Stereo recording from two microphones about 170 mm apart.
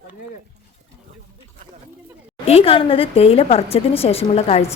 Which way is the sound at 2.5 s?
35° left (ahead or behind).